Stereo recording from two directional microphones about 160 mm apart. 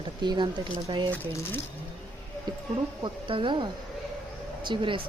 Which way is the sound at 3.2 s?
30° right (ahead or behind).